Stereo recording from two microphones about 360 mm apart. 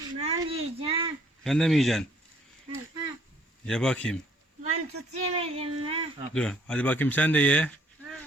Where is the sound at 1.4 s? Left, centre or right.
Centre.